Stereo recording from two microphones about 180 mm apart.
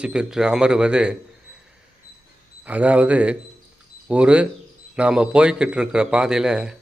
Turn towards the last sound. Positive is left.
turn(degrees=-5)  # may be behind; listen again after turning